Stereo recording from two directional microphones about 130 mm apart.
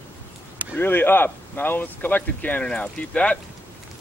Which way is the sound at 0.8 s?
15° left (ahead or behind).